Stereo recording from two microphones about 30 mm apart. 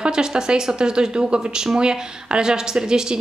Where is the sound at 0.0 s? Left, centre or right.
Right.